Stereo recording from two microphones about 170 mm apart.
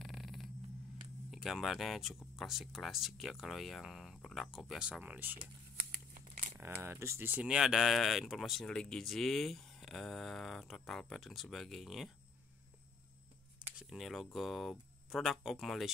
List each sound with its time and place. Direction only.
0.0 s a sound: centre (ahead or behind)
1.3 s speech: centre (ahead or behind)
6.1 s crumpling: 60° right (ahead or behind)
6.6 s speech: 15° right (ahead or behind)
13.7 s speech: centre (ahead or behind)